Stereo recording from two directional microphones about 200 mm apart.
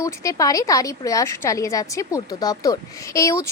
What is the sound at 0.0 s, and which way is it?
A woman's voice, 15° left (ahead or behind).